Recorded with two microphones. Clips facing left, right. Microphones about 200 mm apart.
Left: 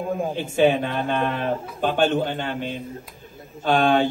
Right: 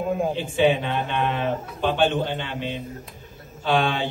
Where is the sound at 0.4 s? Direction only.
45° left (ahead or behind).